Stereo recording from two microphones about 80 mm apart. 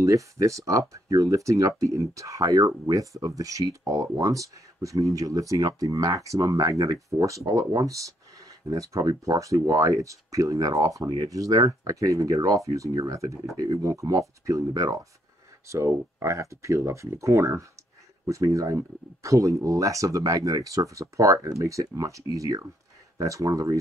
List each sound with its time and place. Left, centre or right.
0.0 s speech: right
15.6 s speech: right